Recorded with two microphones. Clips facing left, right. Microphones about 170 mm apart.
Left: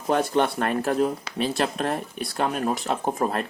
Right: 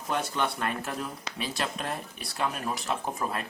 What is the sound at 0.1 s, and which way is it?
Speech, 55° left (ahead or behind).